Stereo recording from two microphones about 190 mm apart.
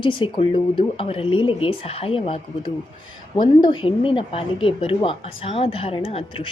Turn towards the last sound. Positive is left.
turn(degrees=30)  # may be behind; listen again after turning